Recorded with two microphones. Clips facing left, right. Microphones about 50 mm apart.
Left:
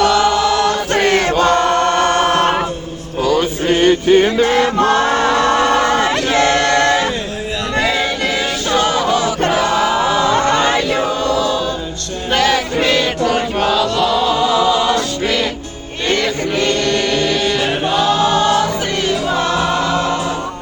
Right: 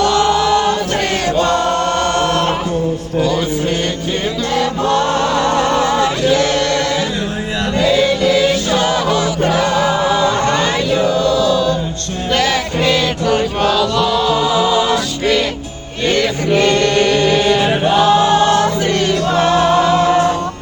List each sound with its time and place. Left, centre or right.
2.0 s chant: left
3.7 s music: left
4.0 s music: left
4.4 s music: left
6.3 s chant: left
8.4 s music: centre
9.6 s chant: centre
11.0 s choir: left
12.4 s chant: centre
16.0 s music: centre
16.6 s chant: centre
17.4 s chant: centre